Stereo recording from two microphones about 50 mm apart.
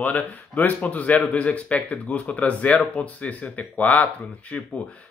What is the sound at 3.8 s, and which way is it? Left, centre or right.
Speech, left.